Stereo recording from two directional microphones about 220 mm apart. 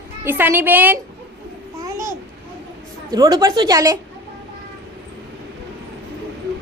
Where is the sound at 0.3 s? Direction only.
10° right (ahead or behind).